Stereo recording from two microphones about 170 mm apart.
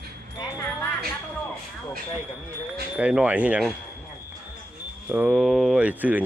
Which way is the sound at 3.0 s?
5° right (ahead or behind).